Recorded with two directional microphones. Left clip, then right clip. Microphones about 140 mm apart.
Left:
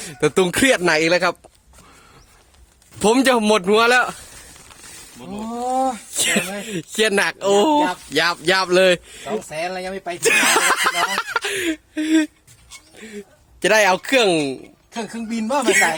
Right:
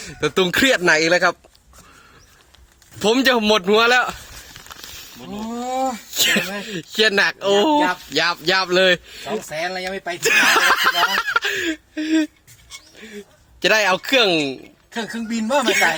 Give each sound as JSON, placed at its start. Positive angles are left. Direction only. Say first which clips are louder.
{"t": 0.0, "sound": "speech", "louder": "left 1 dB", "side_deg": 30}
{"t": 3.0, "sound": "speech", "louder": "left 1 dB", "side_deg": 35}
{"t": 6.1, "sound": "speech", "louder": "right 5 dB", "side_deg": 20}